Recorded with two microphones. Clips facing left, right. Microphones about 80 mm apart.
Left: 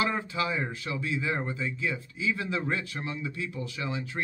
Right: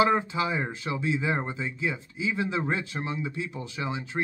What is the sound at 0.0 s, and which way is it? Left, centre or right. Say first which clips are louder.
Speech: right 5 dB; right.